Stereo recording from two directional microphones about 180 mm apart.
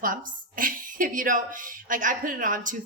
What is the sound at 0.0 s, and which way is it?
A woman's voice, 50° right (ahead or behind).